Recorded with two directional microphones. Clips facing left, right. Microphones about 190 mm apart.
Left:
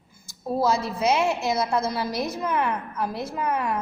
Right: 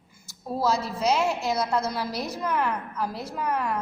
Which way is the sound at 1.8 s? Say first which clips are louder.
Left 3 dB; 25° left (ahead or behind).